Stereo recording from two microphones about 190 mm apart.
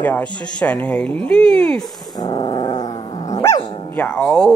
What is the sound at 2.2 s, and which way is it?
Dog, 25° left (ahead or behind).